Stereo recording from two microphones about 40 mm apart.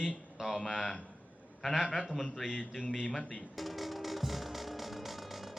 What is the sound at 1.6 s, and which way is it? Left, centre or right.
Speech, centre.